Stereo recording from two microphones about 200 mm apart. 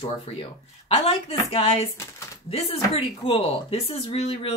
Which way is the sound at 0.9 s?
30° left (ahead or behind).